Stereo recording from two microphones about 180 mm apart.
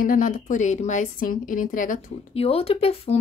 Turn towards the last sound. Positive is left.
turn(degrees=35)  # may be behind; listen again after turning